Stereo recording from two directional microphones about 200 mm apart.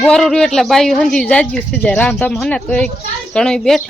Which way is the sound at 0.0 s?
Centre (ahead or behind).